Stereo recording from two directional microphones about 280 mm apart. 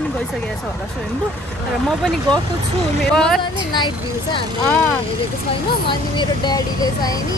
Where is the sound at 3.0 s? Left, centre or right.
Centre.